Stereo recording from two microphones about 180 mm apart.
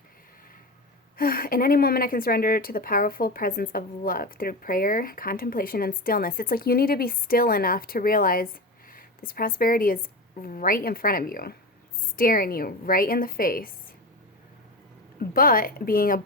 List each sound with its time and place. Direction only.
1.1 s a woman's voice: 55° left (ahead or behind)
15.2 s a woman's voice: 55° left (ahead or behind)